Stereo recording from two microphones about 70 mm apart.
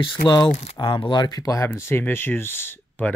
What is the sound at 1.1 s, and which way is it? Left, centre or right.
Speech, left.